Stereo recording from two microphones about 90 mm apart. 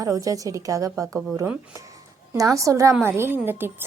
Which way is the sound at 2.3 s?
35° right (ahead or behind).